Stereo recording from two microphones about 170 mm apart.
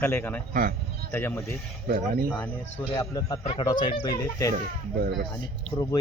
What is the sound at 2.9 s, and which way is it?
Speech, 20° left (ahead or behind).